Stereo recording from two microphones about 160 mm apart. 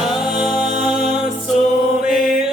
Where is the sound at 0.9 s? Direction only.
Centre (ahead or behind).